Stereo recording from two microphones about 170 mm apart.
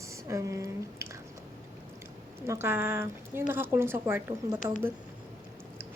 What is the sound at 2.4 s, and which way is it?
A woman's voice, 15° right (ahead or behind).